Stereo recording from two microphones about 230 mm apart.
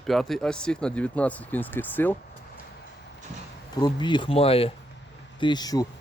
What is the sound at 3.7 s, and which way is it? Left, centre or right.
Speech, centre.